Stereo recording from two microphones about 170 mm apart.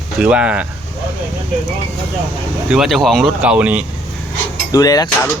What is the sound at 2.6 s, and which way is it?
Speech, 5° right (ahead or behind).